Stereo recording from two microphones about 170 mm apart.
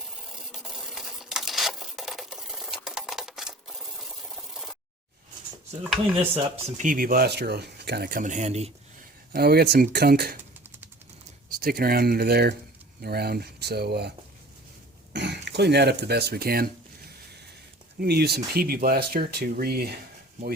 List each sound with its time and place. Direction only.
0.6 s a sound: centre (ahead or behind)
6.3 s speech: 50° right (ahead or behind)
9.3 s speech: 70° right (ahead or behind)
11.6 s speech: 60° right (ahead or behind)
15.1 s speech: 90° right; by 16.6 s 65° right (ahead or behind)
18.0 s speech: 70° right (ahead or behind)